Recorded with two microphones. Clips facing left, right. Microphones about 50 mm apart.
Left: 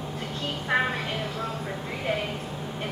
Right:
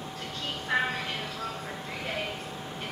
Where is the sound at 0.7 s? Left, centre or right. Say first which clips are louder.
Left 3 dB; centre.